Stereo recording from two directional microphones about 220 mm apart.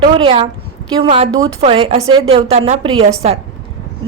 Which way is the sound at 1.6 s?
25° right (ahead or behind).